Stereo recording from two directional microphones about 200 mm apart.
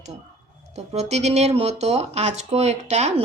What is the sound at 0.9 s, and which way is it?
Speech, 35° right (ahead or behind).